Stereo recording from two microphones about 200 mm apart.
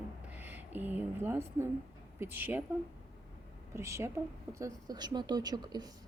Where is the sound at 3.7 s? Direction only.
15° right (ahead or behind).